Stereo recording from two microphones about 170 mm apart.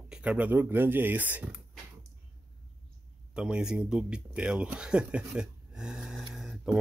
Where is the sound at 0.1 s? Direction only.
10° right (ahead or behind).